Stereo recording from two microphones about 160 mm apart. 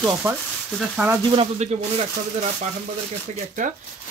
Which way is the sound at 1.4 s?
40° right (ahead or behind).